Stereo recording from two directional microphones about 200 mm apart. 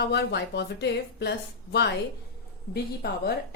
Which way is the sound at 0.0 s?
55° left (ahead or behind).